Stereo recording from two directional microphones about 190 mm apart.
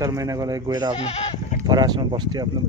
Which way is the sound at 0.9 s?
30° left (ahead or behind).